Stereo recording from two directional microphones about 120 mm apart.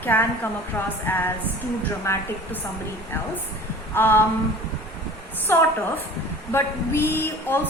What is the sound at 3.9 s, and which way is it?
Speech, 20° left (ahead or behind).